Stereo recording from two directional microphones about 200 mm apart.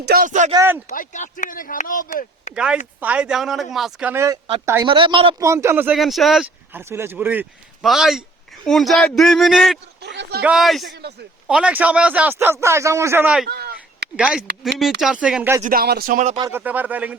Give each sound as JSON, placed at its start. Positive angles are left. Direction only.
{"t": 0.0, "sound": "speech", "side_deg": -50}
{"t": 0.5, "sound": "speech", "side_deg": -15}
{"t": 0.9, "sound": "speech", "side_deg": 40}
{"t": 3.0, "sound": "speech", "side_deg": -5}
{"t": 4.9, "sound": "speech", "side_deg": -25}
{"t": 10.0, "sound": "a sound", "side_deg": -60}
{"t": 10.4, "sound": "speech", "side_deg": 0}
{"t": 11.0, "sound": "speech", "side_deg": -55}
{"t": 11.4, "sound": "speech", "side_deg": -5}
{"t": 13.5, "sound": "a sound", "side_deg": -50}
{"t": 14.2, "sound": "speech", "side_deg": -5}
{"t": 15.6, "sound": "speech", "side_deg": -45}
{"t": 16.4, "sound": "speech", "side_deg": -10}